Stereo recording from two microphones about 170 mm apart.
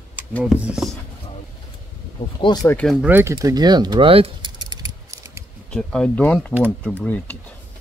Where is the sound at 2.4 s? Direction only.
20° left (ahead or behind).